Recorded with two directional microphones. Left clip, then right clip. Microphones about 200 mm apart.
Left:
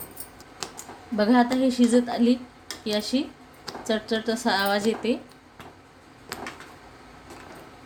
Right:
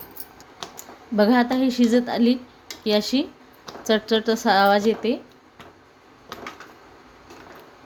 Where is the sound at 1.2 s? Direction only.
30° right (ahead or behind).